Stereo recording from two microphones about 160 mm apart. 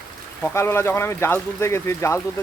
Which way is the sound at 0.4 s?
15° left (ahead or behind).